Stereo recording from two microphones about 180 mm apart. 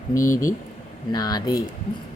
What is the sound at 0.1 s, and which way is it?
Speech, 15° left (ahead or behind).